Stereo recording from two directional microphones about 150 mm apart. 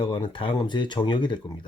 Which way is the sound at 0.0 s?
35° left (ahead or behind).